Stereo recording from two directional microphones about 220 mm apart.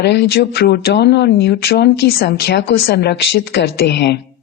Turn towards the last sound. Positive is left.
turn(degrees=50)  # may be behind; listen again after turning